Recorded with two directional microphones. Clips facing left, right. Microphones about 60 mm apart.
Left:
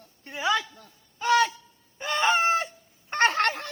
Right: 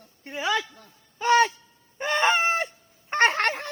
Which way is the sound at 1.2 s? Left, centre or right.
Right.